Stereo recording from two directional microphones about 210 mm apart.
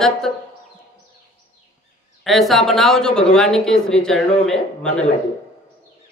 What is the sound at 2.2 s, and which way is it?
Speech, centre (ahead or behind).